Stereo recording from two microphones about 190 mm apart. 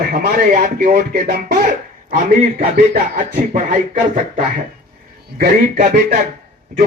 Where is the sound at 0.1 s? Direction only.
45° right (ahead or behind).